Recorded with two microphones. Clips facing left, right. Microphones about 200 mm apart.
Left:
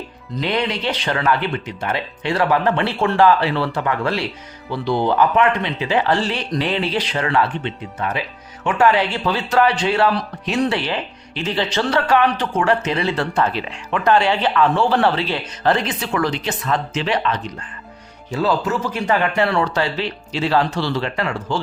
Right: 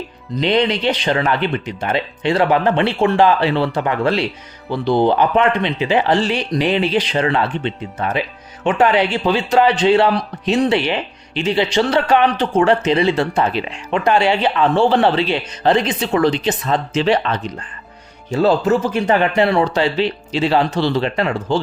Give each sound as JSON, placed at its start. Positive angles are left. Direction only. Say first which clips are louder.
{"t": 0.3, "sound": "speech", "louder": "right 5 dB", "side_deg": -20}